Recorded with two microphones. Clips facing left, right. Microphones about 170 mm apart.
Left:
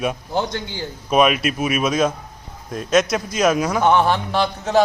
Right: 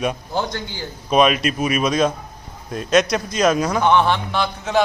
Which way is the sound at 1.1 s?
5° left (ahead or behind).